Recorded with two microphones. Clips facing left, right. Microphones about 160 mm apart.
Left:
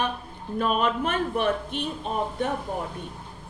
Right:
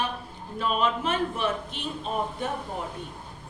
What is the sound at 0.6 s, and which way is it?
A woman's voice, 55° left (ahead or behind).